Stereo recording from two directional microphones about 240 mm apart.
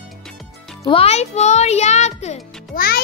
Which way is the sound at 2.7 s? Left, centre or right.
Left.